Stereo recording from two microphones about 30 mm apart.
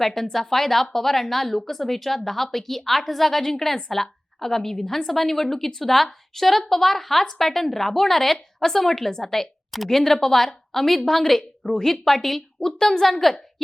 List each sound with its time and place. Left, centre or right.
0.0 s a woman's voice: centre